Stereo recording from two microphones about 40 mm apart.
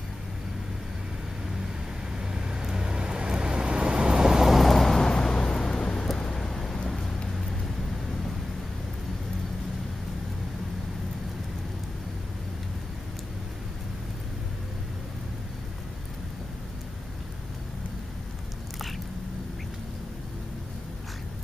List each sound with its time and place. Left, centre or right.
2.1 s vehicle: centre
4.6 s vehicle: centre